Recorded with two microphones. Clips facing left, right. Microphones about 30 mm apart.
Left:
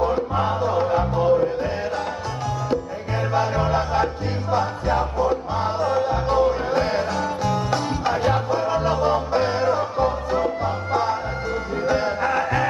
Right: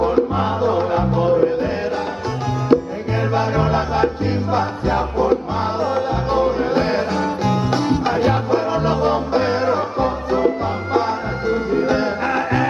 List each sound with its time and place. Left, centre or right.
0.0 s music: centre
2.7 s music: right